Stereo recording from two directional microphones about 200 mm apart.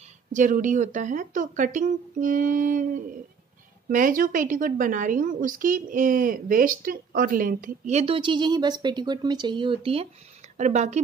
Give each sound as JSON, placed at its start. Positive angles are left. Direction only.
{"t": 0.3, "sound": "a woman's voice", "side_deg": -40}